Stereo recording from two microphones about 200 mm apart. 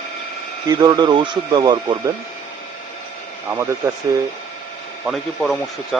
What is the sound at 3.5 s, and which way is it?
Speech, 15° right (ahead or behind).